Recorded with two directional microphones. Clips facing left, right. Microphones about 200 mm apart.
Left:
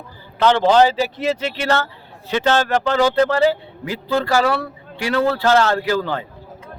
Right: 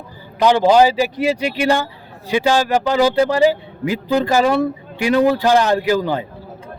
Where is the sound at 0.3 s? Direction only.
10° right (ahead or behind).